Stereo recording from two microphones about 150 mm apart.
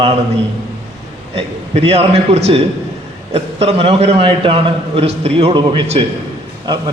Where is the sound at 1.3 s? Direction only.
40° right (ahead or behind).